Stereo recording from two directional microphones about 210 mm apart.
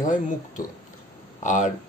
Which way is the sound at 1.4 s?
40° left (ahead or behind).